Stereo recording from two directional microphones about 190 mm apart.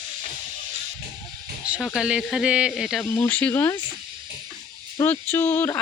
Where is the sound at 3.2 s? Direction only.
10° left (ahead or behind).